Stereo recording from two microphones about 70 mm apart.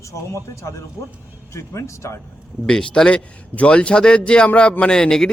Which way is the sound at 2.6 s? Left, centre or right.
Centre.